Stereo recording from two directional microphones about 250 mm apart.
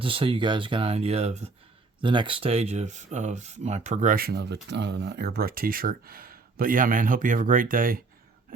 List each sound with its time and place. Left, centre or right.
0.0 s speech: right